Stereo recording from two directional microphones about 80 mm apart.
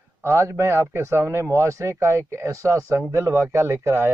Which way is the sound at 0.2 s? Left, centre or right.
Right.